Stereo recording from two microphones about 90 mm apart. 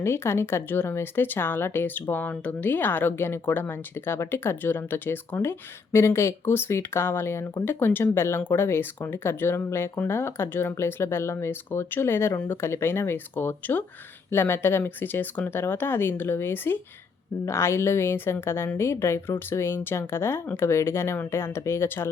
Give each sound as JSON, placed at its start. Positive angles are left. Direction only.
{"t": 0.0, "sound": "speech", "side_deg": 25}